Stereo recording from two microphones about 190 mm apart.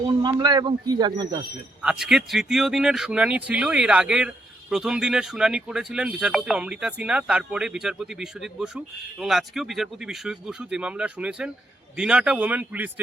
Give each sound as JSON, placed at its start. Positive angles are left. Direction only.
{"t": 0.2, "sound": "speech", "side_deg": -20}
{"t": 1.8, "sound": "a man's voice", "side_deg": -5}